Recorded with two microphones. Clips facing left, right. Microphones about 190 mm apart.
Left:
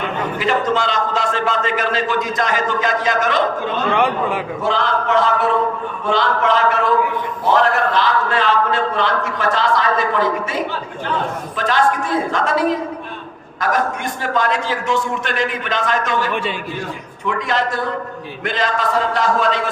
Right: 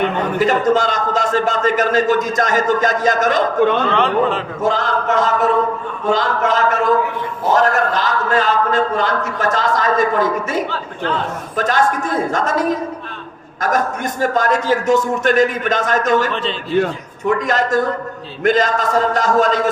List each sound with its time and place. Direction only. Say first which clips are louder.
0.3 s a man's voice: right 4 dB; 45° right (ahead or behind)
3.9 s a man's voice: right 2 dB; 10° left (ahead or behind)
4.6 s a man's voice: right 2 dB; 45° right (ahead or behind)
16.3 s a man's voice: even; 10° left (ahead or behind)
17.2 s a man's voice: right 3 dB; 45° right (ahead or behind)